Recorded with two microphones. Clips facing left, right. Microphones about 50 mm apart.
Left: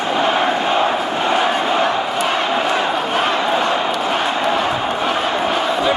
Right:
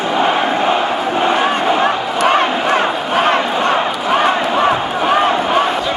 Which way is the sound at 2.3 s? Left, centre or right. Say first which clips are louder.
Right 5 dB; right.